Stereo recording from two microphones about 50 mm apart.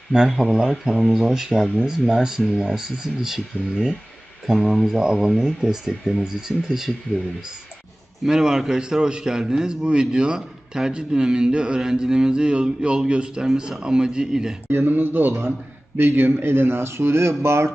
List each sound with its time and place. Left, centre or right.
0.3 s a man's voice: centre
4.4 s a man's voice: centre
8.2 s a man's voice: centre
14.7 s speech: right